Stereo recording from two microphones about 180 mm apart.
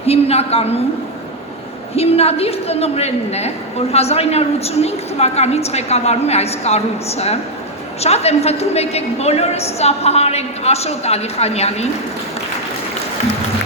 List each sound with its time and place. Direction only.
0.0 s a woman's voice: 35° left (ahead or behind)
2.0 s a woman's voice: 35° left (ahead or behind)